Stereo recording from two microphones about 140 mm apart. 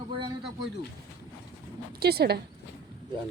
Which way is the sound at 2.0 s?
90° right.